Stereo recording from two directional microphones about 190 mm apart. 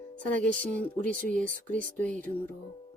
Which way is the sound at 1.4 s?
45° right (ahead or behind).